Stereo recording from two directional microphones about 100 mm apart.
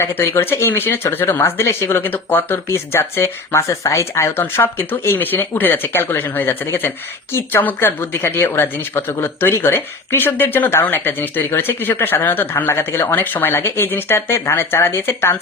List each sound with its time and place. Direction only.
0.0 s speech: 25° left (ahead or behind)